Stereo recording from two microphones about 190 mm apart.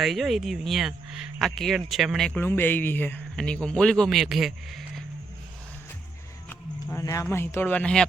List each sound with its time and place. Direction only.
0.0 s speech: centre (ahead or behind)
6.5 s speech: 15° left (ahead or behind)